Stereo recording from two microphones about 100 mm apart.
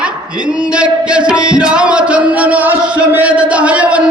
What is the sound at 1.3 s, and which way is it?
Music, 10° right (ahead or behind).